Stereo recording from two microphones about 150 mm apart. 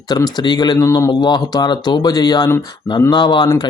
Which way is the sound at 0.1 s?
30° left (ahead or behind).